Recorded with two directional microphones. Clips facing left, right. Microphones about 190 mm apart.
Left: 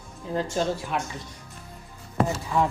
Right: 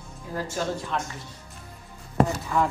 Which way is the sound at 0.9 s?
10° left (ahead or behind).